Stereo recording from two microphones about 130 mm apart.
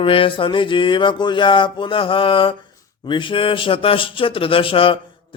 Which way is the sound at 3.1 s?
40° left (ahead or behind).